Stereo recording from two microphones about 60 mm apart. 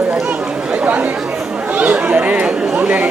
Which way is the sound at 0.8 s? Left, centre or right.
Right.